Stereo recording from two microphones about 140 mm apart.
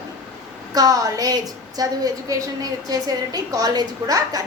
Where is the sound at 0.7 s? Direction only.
25° right (ahead or behind).